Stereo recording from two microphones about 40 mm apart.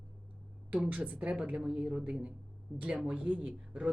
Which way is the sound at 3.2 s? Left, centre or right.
Right.